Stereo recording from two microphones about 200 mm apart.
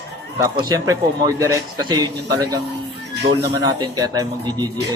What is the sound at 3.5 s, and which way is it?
A man's voice, 20° right (ahead or behind).